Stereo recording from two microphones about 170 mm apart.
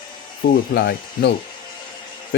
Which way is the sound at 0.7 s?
75° left (ahead or behind).